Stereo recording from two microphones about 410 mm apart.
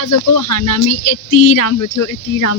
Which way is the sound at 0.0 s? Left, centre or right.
Left.